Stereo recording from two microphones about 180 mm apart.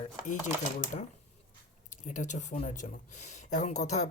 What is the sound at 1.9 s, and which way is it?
Speech, 45° left (ahead or behind).